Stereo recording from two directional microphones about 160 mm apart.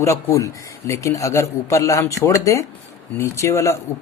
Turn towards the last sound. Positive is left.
turn(degrees=20)  # may be behind; listen again after turning